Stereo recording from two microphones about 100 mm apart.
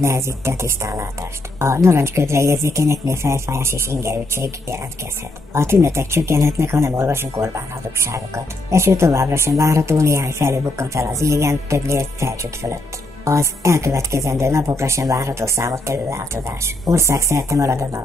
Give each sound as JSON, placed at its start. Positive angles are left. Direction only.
{"t": 0.0, "sound": "speech", "side_deg": -30}